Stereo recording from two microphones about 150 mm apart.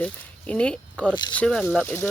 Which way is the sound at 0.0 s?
10° left (ahead or behind).